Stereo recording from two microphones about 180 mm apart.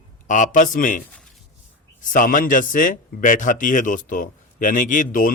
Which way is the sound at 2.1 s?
50° left (ahead or behind).